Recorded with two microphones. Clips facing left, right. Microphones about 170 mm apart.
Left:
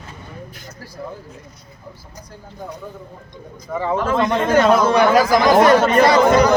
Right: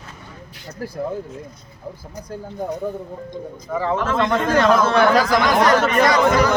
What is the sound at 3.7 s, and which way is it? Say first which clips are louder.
A man's voice: left 1 dB; 5° left (ahead or behind).